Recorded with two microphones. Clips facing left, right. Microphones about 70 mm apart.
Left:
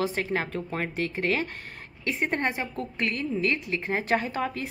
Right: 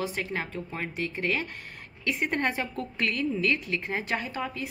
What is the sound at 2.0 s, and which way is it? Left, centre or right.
A woman's voice, left.